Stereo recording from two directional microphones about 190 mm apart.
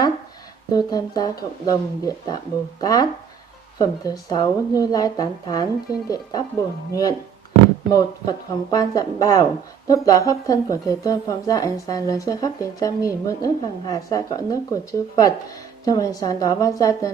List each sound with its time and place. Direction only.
0.7 s a woman's voice: 20° left (ahead or behind)